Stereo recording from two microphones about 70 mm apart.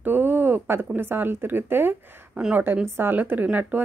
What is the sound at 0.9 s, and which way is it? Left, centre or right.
A woman's voice, right.